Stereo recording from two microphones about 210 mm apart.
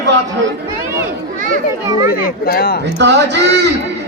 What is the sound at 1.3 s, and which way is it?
Speech, 40° right (ahead or behind).